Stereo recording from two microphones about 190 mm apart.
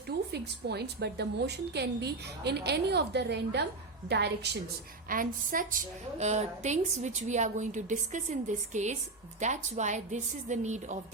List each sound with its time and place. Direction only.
0.3 s a woman's voice: 60° right (ahead or behind)
5.0 s a woman's voice: 45° right (ahead or behind)